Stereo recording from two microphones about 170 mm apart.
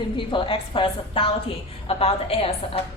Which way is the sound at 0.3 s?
30° left (ahead or behind).